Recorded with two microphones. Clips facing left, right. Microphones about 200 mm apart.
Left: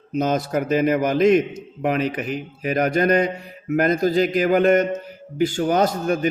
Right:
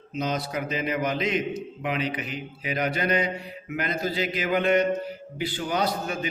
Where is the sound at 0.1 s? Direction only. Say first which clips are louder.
Left 7 dB; 50° left (ahead or behind).